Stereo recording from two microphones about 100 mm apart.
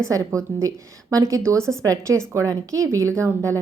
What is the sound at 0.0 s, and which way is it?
A woman's voice, 30° right (ahead or behind).